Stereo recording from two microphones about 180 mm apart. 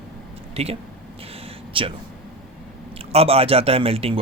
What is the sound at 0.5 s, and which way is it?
A man's voice, 35° right (ahead or behind).